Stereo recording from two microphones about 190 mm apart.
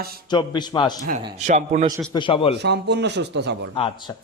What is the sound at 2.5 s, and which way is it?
A man's voice, 65° right (ahead or behind).